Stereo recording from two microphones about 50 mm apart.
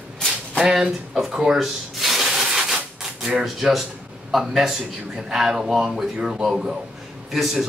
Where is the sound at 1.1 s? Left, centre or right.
Centre.